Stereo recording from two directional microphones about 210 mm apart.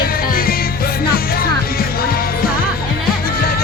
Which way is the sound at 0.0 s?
45° left (ahead or behind).